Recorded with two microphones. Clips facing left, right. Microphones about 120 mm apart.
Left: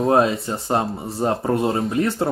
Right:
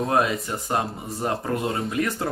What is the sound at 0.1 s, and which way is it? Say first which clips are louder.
Speech: left 6 dB; 30° left (ahead or behind).